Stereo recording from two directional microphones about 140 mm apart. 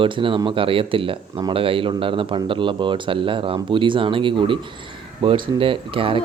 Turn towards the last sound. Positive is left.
turn(degrees=-40)  # may be behind; listen again after turning